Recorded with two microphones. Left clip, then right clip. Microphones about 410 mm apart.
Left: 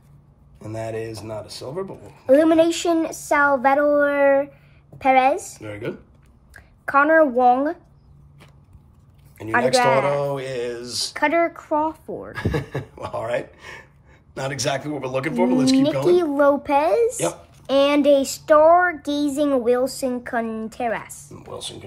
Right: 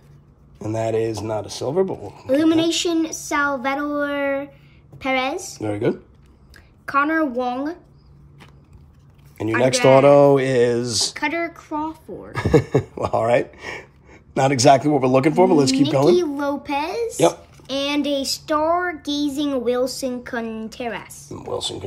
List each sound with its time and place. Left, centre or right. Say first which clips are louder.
0.7 s speech: right 7 dB; centre
2.2 s a sound: left 3 dB; centre
5.6 s speech: right 9 dB; centre
6.5 s speech: left 2 dB; centre
9.6 s speech: right 3 dB; centre
11.1 s speech: left 4 dB; centre
12.3 s speech: right 11 dB; centre
16.3 s speech: left 6 dB; centre
17.6 s a sound: left 7 dB; centre
21.5 s speech: right 7 dB; centre